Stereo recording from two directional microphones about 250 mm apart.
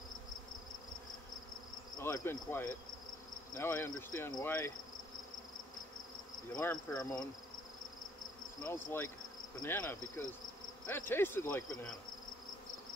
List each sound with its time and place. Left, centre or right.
2.0 s insect: centre
3.5 s cricket: centre
6.5 s insect: centre
8.6 s cricket: centre